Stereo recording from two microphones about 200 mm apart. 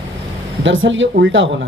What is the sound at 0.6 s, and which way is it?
Speech, 70° right (ahead or behind).